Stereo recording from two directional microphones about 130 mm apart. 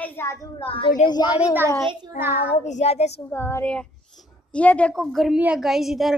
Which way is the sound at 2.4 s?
65° left (ahead or behind).